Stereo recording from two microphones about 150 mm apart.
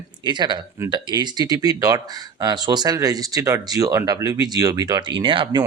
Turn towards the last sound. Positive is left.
turn(degrees=-30)  # may be behind; listen again after turning